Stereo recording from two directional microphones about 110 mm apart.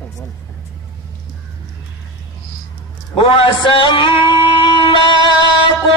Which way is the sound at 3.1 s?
50° left (ahead or behind).